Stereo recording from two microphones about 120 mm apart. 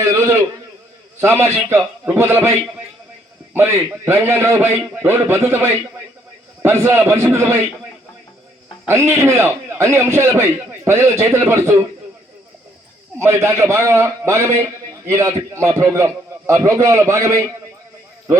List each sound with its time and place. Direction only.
0.0 s a sound: 25° right (ahead or behind)
1.2 s a man's voice: 20° right (ahead or behind)
3.5 s a man's voice: 20° right (ahead or behind)
8.9 s a man's voice: 20° right (ahead or behind)
13.1 s a man's voice: 20° right (ahead or behind)